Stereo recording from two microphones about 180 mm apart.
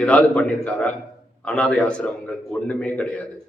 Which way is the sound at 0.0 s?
5° left (ahead or behind).